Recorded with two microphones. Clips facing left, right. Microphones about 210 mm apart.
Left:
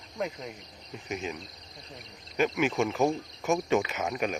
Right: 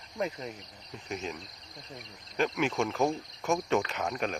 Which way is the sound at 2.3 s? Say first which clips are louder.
Left 2 dB; 5° left (ahead or behind).